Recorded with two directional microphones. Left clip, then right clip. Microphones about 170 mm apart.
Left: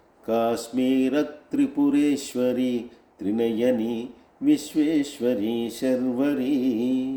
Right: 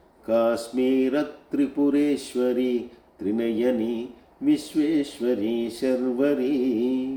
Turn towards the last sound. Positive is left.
turn(degrees=40)  # may be behind; listen again after turning